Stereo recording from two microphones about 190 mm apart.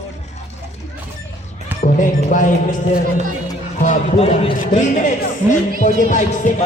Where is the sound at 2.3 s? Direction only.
45° left (ahead or behind).